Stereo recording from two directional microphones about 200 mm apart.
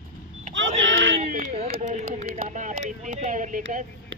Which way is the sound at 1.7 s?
40° right (ahead or behind).